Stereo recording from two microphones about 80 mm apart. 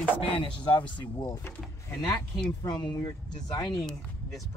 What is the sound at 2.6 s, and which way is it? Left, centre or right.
Speech, left.